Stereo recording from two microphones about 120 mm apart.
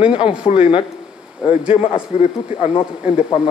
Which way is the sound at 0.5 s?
50° left (ahead or behind).